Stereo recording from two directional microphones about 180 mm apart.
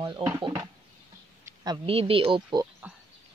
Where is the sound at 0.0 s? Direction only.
20° right (ahead or behind).